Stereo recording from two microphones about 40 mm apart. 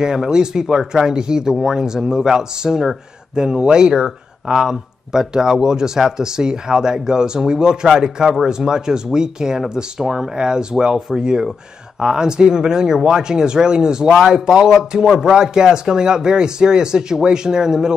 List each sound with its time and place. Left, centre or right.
0.0 s speech: centre